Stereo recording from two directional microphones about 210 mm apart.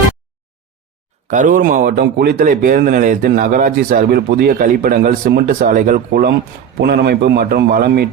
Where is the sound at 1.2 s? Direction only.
40° right (ahead or behind).